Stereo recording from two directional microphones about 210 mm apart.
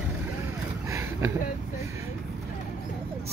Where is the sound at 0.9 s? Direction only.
10° right (ahead or behind).